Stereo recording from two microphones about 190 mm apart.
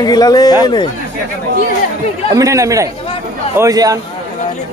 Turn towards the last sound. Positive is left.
turn(degrees=-20)  # may be behind; listen again after turning